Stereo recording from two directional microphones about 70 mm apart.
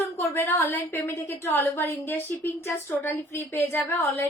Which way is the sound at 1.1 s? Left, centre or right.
Left.